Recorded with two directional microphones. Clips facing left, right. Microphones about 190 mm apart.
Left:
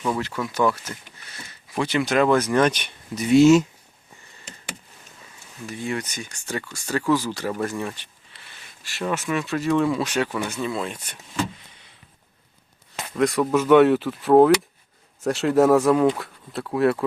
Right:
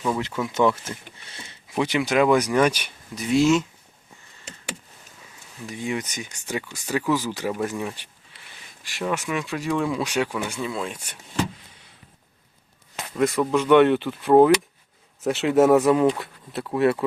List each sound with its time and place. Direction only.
0.2 s speech: 20° right (ahead or behind)
2.0 s speech: 5° right (ahead or behind)
5.6 s speech: 15° right (ahead or behind)
13.1 s speech: centre (ahead or behind)